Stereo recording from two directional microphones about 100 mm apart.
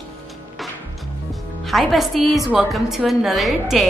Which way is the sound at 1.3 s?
Centre (ahead or behind).